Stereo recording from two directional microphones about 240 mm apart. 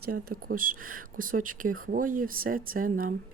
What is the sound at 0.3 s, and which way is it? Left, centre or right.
Speech, right.